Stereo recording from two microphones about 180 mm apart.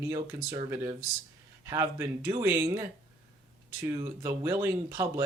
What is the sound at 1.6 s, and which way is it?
Speech, 15° right (ahead or behind).